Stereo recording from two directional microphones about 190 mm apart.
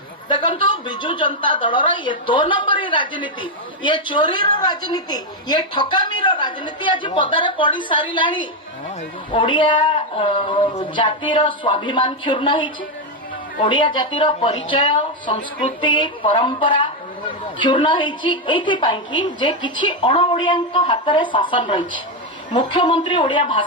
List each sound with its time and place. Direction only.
0.3 s a woman's voice: 25° left (ahead or behind)